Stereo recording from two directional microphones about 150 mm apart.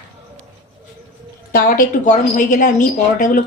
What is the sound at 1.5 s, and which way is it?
A woman's voice, 65° left (ahead or behind).